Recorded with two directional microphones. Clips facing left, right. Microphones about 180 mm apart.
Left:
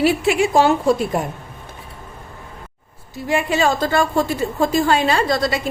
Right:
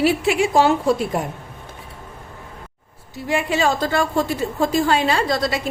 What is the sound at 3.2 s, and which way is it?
A woman's voice, 45° left (ahead or behind).